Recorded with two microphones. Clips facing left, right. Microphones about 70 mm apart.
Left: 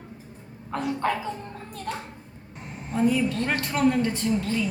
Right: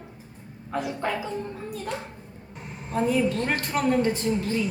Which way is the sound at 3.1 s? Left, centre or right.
Right.